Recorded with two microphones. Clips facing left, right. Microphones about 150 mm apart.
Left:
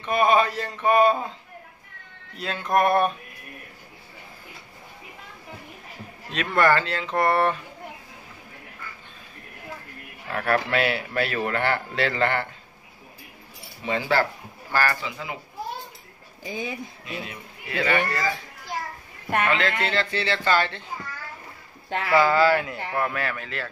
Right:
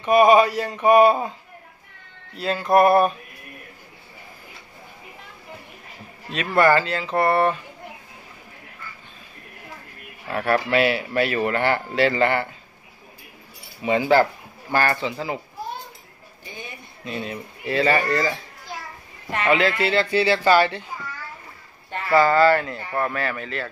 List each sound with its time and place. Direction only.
0.0 s speech: 10° right (ahead or behind)
2.3 s speech: centre (ahead or behind)
6.3 s speech: 5° right (ahead or behind)
10.3 s speech: 5° right (ahead or behind)
13.8 s a man's voice: 15° right (ahead or behind)
17.0 s speech: 35° right (ahead or behind)
19.5 s speech: 10° right (ahead or behind)
22.1 s speech: 5° left (ahead or behind)